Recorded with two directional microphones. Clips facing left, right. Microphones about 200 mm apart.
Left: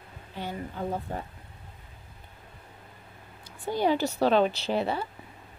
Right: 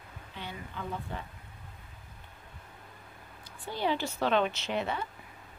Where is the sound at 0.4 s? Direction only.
40° left (ahead or behind).